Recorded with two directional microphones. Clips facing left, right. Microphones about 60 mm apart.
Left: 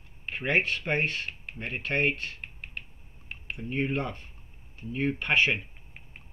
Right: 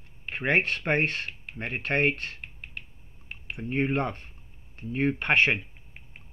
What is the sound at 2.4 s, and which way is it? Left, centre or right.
Finger snapping, centre.